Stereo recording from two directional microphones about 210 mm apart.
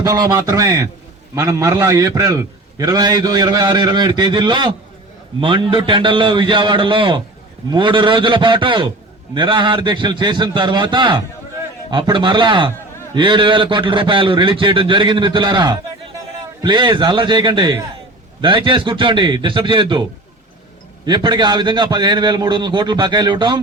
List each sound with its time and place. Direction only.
0.0 s a man's voice: 15° right (ahead or behind)